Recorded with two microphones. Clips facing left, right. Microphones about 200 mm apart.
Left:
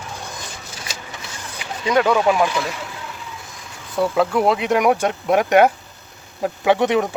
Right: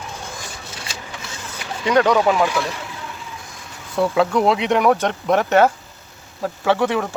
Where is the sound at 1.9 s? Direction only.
10° left (ahead or behind).